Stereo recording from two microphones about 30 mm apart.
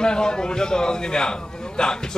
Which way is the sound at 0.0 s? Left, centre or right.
Left.